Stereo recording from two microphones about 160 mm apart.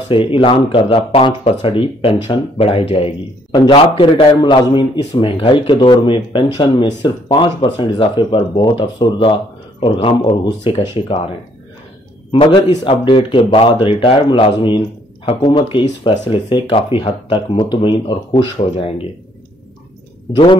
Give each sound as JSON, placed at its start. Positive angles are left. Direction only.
{"t": 0.1, "sound": "speech", "side_deg": 35}
{"t": 12.3, "sound": "speech", "side_deg": 35}